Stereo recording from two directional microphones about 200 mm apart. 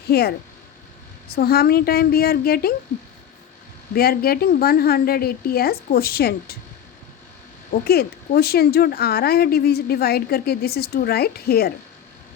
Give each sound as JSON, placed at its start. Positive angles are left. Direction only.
{"t": 0.1, "sound": "speech", "side_deg": 50}
{"t": 3.9, "sound": "speech", "side_deg": 50}
{"t": 7.7, "sound": "speech", "side_deg": 50}